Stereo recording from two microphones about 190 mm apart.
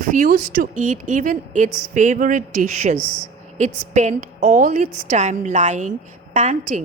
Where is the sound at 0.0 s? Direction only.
45° right (ahead or behind).